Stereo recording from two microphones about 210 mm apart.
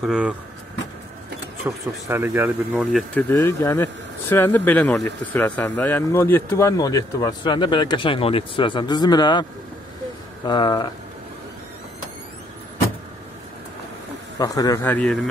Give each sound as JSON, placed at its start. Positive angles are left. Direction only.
{"t": 0.0, "sound": "speech", "side_deg": -5}
{"t": 1.6, "sound": "speech", "side_deg": -10}
{"t": 14.4, "sound": "speech", "side_deg": 15}